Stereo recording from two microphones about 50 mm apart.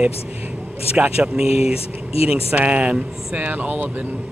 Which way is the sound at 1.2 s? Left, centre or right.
Centre.